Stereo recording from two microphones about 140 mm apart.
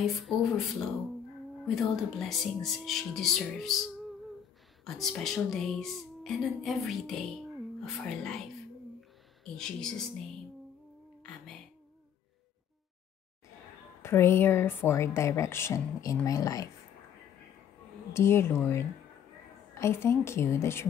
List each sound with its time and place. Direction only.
0.0 s speech: centre (ahead or behind)
9.4 s speech: 5° left (ahead or behind)
14.0 s a woman's voice: 20° left (ahead or behind)
18.1 s a woman's voice: 20° left (ahead or behind)